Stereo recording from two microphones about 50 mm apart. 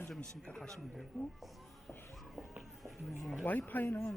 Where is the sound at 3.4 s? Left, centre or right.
Left.